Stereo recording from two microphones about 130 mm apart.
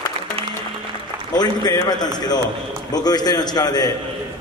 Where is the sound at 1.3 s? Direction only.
30° left (ahead or behind).